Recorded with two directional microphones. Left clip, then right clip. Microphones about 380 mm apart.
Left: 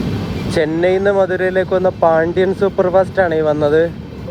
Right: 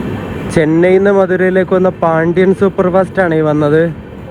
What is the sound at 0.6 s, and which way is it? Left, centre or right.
Speech, right.